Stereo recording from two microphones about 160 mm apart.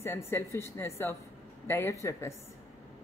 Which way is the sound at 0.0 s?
15° left (ahead or behind).